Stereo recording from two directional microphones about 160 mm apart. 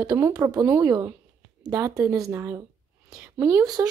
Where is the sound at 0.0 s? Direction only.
20° right (ahead or behind).